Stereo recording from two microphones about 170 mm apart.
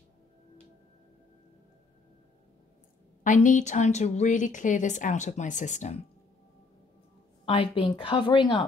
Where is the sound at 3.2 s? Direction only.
45° left (ahead or behind).